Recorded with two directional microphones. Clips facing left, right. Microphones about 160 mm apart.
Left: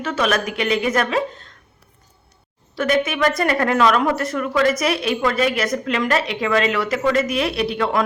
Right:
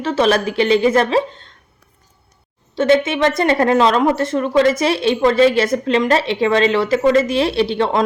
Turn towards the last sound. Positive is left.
turn(degrees=-30)  # may be behind; listen again after turning